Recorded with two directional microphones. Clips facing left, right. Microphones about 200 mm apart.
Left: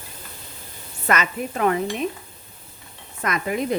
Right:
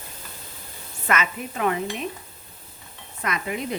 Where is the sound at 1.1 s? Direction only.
40° left (ahead or behind).